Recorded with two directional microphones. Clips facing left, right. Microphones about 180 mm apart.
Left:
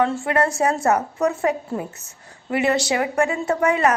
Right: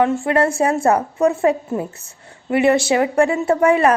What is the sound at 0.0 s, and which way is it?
A woman's voice, 20° right (ahead or behind).